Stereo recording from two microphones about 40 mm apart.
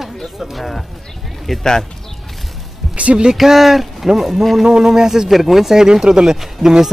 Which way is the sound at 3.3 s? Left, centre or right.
Centre.